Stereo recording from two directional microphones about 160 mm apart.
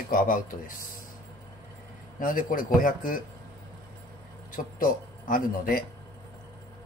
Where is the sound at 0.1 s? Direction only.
60° left (ahead or behind).